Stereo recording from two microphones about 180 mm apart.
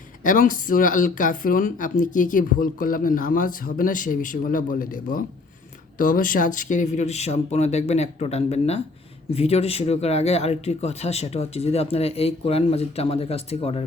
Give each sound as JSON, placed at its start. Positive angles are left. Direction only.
{"t": 0.2, "sound": "speech", "side_deg": 50}